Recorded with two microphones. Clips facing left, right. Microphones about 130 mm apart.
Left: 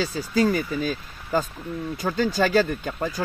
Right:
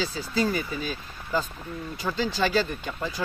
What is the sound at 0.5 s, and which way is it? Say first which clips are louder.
Speech: left 5 dB; 45° left (ahead or behind).